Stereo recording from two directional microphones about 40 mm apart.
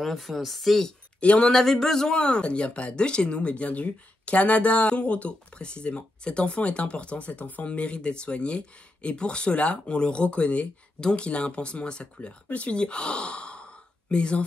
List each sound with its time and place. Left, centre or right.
0.0 s speech: centre
1.2 s speech: left
1.5 s speech: centre
2.0 s speech: left
7.6 s speech: left